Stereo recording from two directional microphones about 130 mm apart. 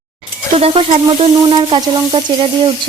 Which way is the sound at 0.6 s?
50° right (ahead or behind).